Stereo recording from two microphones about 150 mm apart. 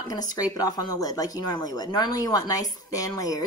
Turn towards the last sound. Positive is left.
turn(degrees=25)  # may be behind; listen again after turning